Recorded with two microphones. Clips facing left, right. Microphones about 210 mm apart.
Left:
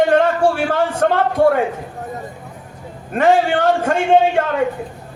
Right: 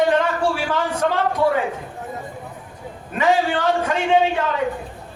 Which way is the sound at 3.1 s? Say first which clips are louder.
Left 5 dB; 50° left (ahead or behind).